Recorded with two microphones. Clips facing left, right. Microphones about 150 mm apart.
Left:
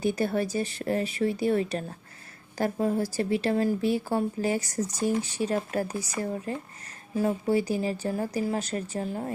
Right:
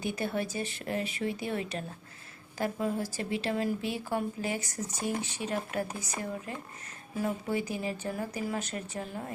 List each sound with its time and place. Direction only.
0.0 s speech: 40° left (ahead or behind)